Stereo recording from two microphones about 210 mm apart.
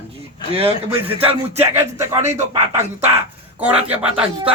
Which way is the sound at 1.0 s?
25° right (ahead or behind).